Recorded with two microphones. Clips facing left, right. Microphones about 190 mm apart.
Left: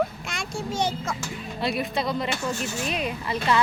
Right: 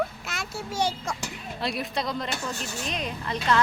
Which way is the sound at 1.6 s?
Centre (ahead or behind).